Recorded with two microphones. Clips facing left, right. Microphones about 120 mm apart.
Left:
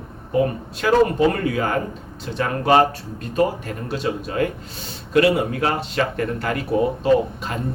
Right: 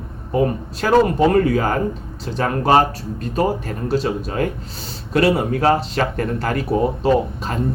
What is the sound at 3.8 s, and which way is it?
Speech, 40° right (ahead or behind).